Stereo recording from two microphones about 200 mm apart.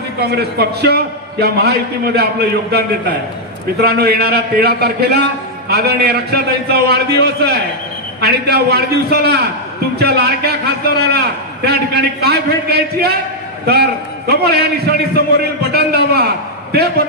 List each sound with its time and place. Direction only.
0.2 s a man's voice: 55° right (ahead or behind)